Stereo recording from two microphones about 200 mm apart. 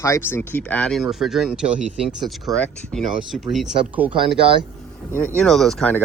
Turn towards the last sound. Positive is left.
turn(degrees=5)  # may be behind; listen again after turning